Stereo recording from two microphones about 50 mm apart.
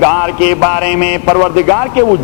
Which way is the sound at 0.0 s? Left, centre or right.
Right.